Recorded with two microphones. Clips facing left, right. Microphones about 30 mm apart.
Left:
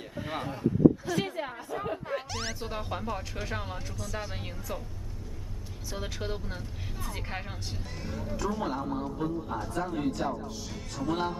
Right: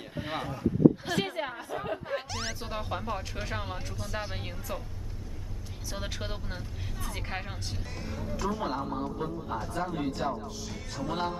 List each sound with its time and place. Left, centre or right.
0.1 s a sound: right
1.0 s a woman's voice: right
1.8 s a man's voice: centre
4.0 s a man's voice: right
5.9 s a man's voice: centre